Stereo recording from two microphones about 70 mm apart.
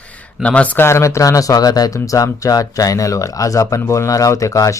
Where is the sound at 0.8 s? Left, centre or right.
Left.